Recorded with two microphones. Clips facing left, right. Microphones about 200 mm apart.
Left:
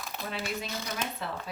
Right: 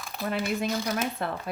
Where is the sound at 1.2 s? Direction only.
55° right (ahead or behind).